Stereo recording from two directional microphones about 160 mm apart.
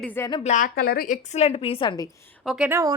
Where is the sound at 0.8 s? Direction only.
70° left (ahead or behind); by 2.0 s 30° left (ahead or behind).